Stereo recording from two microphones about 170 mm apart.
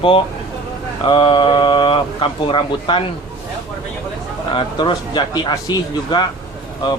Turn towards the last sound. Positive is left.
turn(degrees=25)  # may be behind; listen again after turning